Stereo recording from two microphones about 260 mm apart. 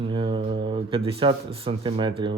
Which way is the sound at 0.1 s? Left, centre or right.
Centre.